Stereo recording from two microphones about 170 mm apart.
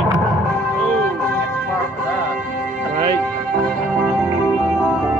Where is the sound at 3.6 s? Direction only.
5° left (ahead or behind).